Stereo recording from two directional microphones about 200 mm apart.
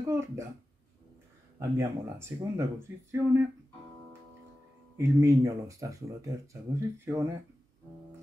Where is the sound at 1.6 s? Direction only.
15° right (ahead or behind).